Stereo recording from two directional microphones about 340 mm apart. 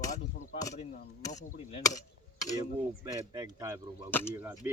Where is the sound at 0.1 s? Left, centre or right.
Centre.